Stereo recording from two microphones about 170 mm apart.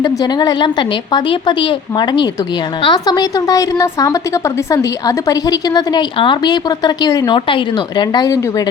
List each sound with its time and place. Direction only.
0.0 s a woman's voice: 20° left (ahead or behind)